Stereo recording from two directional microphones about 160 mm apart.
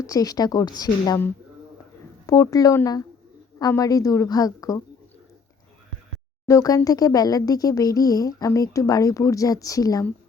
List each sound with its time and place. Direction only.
0.0 s speech: 20° left (ahead or behind)
2.2 s speech: 20° left (ahead or behind)
6.5 s speech: 20° left (ahead or behind)